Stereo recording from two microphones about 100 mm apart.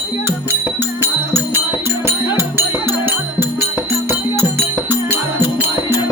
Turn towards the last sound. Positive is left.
turn(degrees=-20)  # may be behind; listen again after turning